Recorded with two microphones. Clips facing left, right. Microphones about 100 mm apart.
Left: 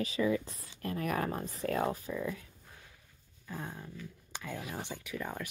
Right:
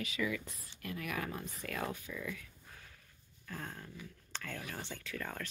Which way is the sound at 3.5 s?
15° left (ahead or behind).